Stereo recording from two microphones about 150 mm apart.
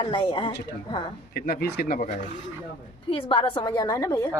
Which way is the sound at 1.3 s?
90° left.